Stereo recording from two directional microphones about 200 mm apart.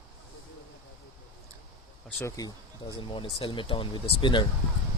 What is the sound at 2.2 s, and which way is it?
Speech, 15° left (ahead or behind).